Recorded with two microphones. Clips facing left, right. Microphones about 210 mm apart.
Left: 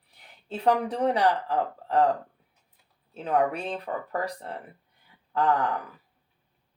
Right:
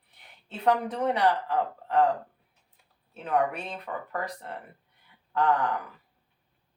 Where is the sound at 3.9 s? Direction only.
30° left (ahead or behind).